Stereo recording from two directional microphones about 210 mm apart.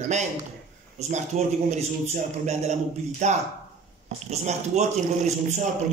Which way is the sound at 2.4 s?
35° right (ahead or behind).